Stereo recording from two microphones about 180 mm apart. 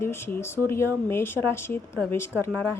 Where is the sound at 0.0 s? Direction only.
15° left (ahead or behind).